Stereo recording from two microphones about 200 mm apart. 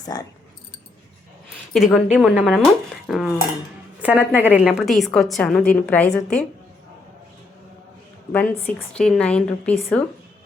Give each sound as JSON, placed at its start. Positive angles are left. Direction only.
{"t": 0.1, "sound": "speech", "side_deg": 20}
{"t": 1.7, "sound": "a woman's voice", "side_deg": 0}
{"t": 8.3, "sound": "a woman's voice", "side_deg": 5}